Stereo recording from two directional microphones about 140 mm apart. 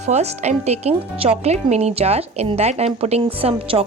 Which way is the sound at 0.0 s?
50° right (ahead or behind).